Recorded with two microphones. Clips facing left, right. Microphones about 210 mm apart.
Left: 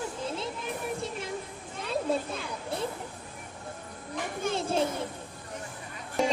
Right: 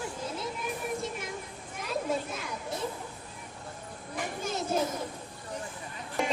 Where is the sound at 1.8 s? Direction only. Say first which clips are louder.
Left 2 dB; 30° left (ahead or behind).